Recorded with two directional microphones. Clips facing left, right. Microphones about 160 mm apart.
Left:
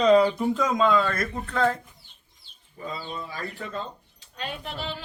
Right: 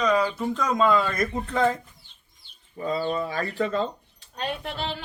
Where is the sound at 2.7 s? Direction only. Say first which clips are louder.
Right 8 dB; 40° right (ahead or behind).